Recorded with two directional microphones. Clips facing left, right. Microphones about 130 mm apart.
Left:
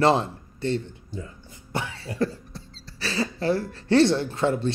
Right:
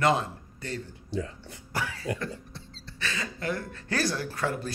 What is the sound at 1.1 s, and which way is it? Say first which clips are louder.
Speech: right 5 dB; 80° right.